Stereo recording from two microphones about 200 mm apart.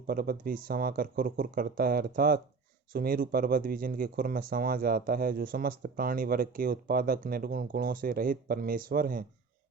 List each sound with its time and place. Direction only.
0.1 s speech: 45° right (ahead or behind)